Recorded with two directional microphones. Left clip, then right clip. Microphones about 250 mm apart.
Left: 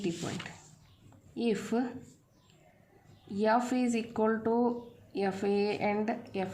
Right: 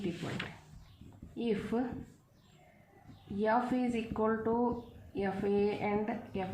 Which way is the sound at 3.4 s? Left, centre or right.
Left.